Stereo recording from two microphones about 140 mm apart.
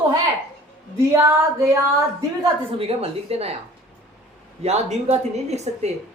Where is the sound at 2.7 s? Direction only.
45° right (ahead or behind).